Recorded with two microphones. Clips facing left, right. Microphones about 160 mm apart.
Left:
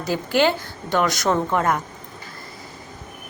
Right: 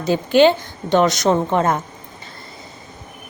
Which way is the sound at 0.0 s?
20° right (ahead or behind).